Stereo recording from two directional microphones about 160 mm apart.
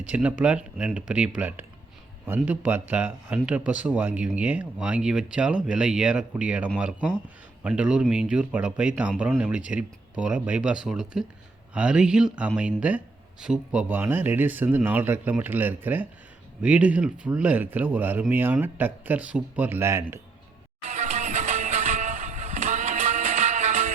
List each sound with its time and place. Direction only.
0.1 s speech: 10° right (ahead or behind)
20.8 s vehicle: 45° right (ahead or behind)